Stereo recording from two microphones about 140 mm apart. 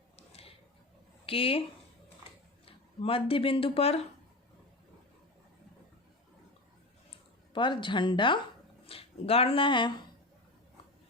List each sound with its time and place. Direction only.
0.2 s a sound: 45° left (ahead or behind)
1.2 s speech: 40° left (ahead or behind)
2.6 s speech: 40° left (ahead or behind)
7.5 s speech: 35° left (ahead or behind)